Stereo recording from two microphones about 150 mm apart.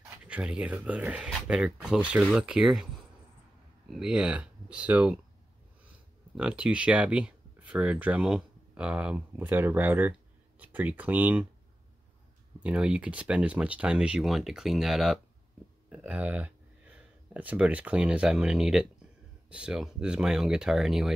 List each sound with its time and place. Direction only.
0.3 s speech: 10° right (ahead or behind)
3.9 s speech: 5° right (ahead or behind)
6.3 s speech: 5° right (ahead or behind)
12.6 s speech: 5° right (ahead or behind)